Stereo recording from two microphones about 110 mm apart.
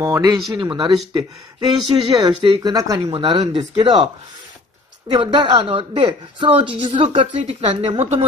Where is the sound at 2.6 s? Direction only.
35° right (ahead or behind).